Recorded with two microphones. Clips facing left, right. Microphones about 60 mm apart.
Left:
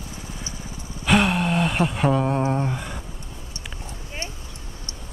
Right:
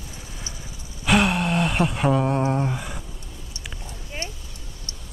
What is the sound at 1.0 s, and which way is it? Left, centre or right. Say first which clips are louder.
Gasp: even; centre.